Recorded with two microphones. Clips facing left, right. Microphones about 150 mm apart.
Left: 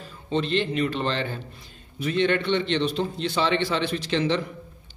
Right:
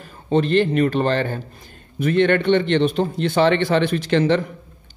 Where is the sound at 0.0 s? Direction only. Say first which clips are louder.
Right 7 dB; 50° right (ahead or behind).